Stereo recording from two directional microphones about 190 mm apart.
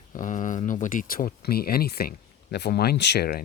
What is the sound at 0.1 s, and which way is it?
Speech, 40° left (ahead or behind).